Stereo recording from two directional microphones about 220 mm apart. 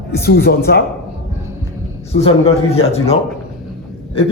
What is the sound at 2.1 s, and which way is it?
Speech, 25° left (ahead or behind).